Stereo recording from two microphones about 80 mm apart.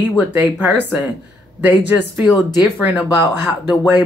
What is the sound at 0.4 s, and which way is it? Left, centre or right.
Speech, right.